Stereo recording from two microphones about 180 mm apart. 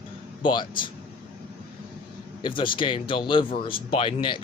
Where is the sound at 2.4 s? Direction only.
30° left (ahead or behind).